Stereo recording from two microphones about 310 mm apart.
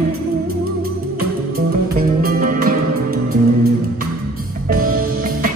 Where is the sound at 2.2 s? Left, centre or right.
Right.